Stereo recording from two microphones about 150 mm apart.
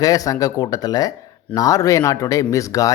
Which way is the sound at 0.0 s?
25° left (ahead or behind).